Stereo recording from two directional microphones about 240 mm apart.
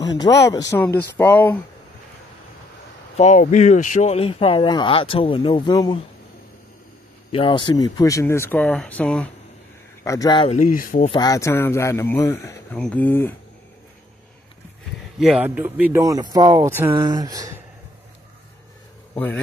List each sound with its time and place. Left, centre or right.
0.0 s speech: centre
3.2 s speech: left
7.3 s speech: centre
10.0 s speech: centre; by 11.1 s left
11.1 s speech: centre
15.1 s speech: centre
19.1 s a man's voice: centre